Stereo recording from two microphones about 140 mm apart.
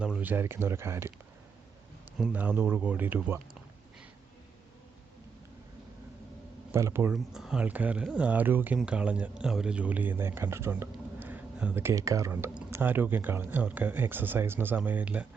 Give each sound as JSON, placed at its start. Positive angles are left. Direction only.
{"t": 0.2, "sound": "speech", "side_deg": -15}
{"t": 2.3, "sound": "speech", "side_deg": -15}
{"t": 6.7, "sound": "speech", "side_deg": -20}
{"t": 7.1, "sound": "speech", "side_deg": -5}